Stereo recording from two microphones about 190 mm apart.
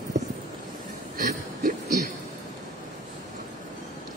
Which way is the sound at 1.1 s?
45° right (ahead or behind).